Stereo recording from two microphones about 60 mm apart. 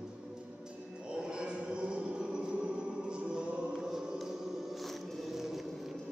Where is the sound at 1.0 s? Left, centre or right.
Centre.